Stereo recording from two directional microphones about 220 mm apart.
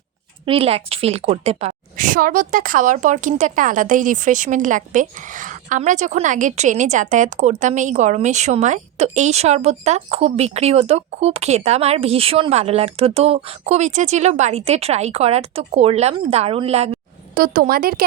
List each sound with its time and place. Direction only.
0.4 s a woman's voice: 25° right (ahead or behind); by 18.0 s 40° right (ahead or behind)